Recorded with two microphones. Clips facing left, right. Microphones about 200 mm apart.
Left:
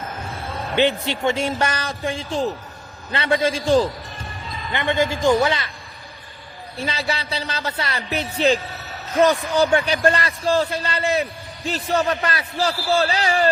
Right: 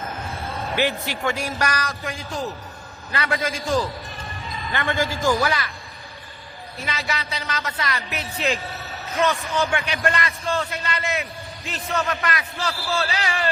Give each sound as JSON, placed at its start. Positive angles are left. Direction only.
{"t": 0.8, "sound": "speech", "side_deg": 25}
{"t": 6.7, "sound": "a man's voice", "side_deg": 30}